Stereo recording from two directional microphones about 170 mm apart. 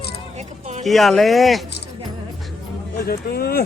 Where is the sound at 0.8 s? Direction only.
Centre (ahead or behind).